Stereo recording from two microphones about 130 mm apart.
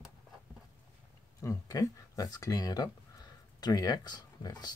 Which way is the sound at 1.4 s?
25° left (ahead or behind).